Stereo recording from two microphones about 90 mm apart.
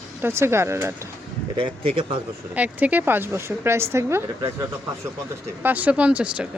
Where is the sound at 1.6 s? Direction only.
90° right.